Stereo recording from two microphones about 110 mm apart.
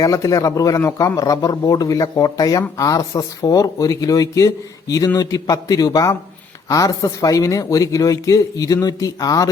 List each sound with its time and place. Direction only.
0.0 s speech: 30° left (ahead or behind)